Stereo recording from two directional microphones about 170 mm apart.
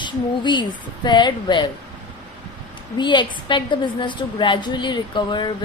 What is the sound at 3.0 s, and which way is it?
A woman's voice, 25° left (ahead or behind).